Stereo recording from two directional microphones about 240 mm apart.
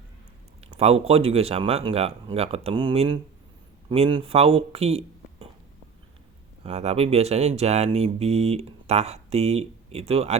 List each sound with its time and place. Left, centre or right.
0.6 s speech: right
6.6 s speech: right